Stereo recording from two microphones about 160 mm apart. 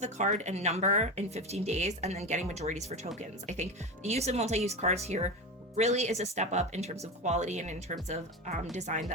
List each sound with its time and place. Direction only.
0.0 s speech: 45° right (ahead or behind)